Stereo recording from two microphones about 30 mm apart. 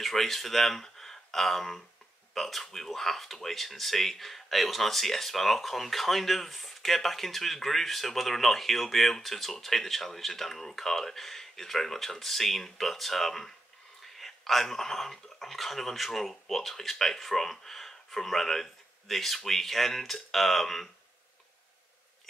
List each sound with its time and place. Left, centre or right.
0.0 s speech: centre